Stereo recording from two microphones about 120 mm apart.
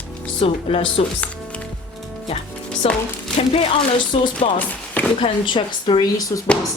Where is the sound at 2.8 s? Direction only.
55° left (ahead or behind).